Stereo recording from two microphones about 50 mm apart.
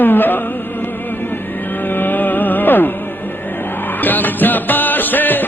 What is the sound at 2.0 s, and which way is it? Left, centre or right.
Music, left.